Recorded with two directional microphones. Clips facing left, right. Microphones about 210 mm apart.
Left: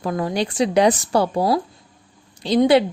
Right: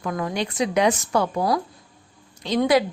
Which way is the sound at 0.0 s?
30° left (ahead or behind).